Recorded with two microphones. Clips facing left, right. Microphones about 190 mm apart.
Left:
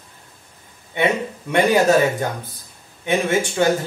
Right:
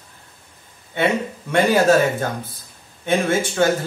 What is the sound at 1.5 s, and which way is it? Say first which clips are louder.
Speech: even; 15° left (ahead or behind).